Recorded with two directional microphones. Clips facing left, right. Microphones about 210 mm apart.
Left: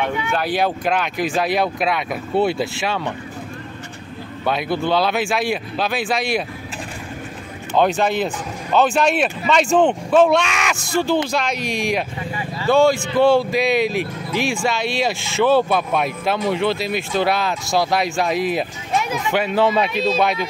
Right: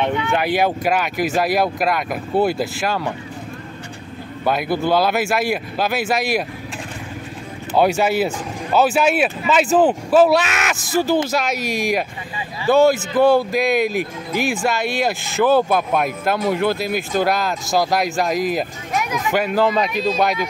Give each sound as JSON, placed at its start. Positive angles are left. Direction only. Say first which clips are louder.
{"t": 0.0, "sound": "speech", "louder": "right 2 dB", "side_deg": -15}
{"t": 4.5, "sound": "speech", "louder": "right 1 dB", "side_deg": -5}
{"t": 7.7, "sound": "speech", "louder": "right 1 dB", "side_deg": -10}
{"t": 18.9, "sound": "a sound", "louder": "left 3 dB", "side_deg": 30}
{"t": 19.3, "sound": "speech", "louder": "even", "side_deg": 0}